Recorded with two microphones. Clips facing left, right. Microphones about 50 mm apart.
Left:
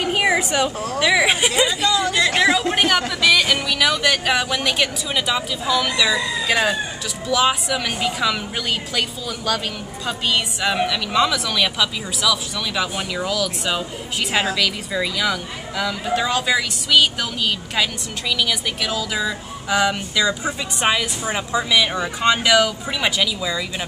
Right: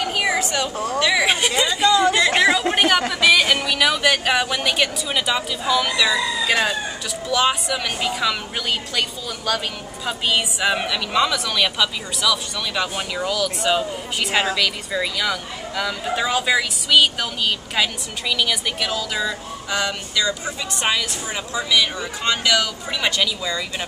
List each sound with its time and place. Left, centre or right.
0.0 s a sound: centre
0.7 s speech: centre
18.3 s a woman's voice: centre